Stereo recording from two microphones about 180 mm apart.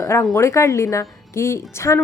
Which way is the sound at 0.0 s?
20° left (ahead or behind).